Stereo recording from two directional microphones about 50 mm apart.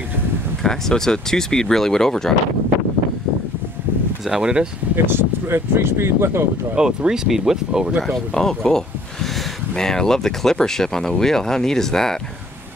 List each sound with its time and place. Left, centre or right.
0.7 s speech: centre
4.3 s speech: centre
4.9 s speech: right
6.7 s speech: centre
8.4 s speech: centre